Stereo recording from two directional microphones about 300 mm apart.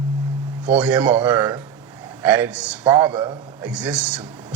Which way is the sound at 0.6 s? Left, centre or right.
Centre.